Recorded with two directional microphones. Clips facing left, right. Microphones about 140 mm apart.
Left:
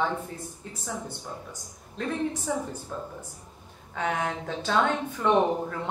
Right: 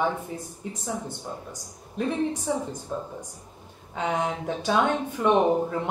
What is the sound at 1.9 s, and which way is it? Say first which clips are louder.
Speech: right 3 dB; 15° right (ahead or behind).